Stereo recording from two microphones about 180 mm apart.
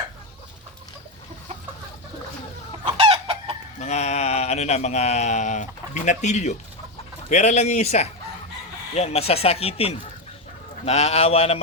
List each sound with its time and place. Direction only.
2.8 s chicken: 30° right (ahead or behind)
3.8 s speech: 40° left (ahead or behind)